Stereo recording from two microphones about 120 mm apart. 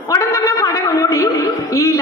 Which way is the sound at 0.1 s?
25° left (ahead or behind).